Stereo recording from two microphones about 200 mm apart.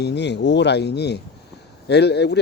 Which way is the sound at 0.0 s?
60° left (ahead or behind).